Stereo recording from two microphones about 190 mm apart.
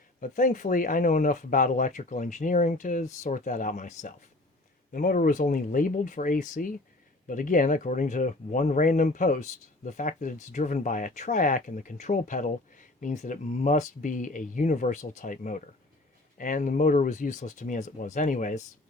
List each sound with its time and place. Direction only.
0.2 s speech: 45° left (ahead or behind)